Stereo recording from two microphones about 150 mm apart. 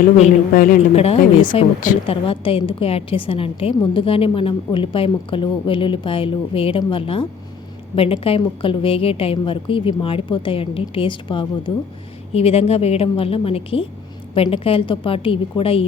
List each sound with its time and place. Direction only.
0.2 s speech: 55° left (ahead or behind)
0.9 s a woman's voice: 40° left (ahead or behind)